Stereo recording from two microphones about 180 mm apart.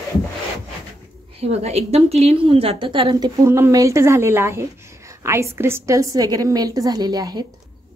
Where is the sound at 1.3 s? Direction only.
35° right (ahead or behind).